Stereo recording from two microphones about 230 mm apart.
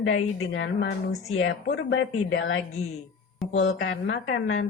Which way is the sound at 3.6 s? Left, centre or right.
Left.